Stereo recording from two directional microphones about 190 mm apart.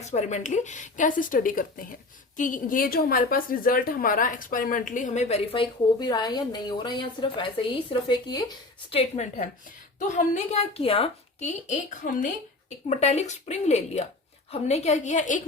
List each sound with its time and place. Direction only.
0.0 s a woman's voice: 35° left (ahead or behind)
6.0 s a woman's voice: 20° left (ahead or behind); by 15.4 s 40° left (ahead or behind)